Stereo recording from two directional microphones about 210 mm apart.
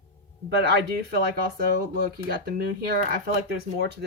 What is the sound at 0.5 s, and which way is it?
Speech, 50° right (ahead or behind).